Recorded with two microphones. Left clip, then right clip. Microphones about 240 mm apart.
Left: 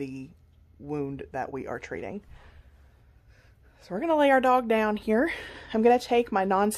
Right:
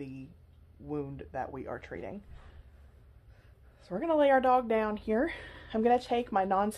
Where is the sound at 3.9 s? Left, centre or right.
Left.